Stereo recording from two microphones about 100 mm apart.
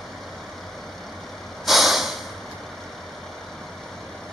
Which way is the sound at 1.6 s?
Centre (ahead or behind).